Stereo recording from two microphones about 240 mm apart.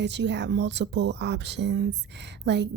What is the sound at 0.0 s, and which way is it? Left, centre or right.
Speech, right.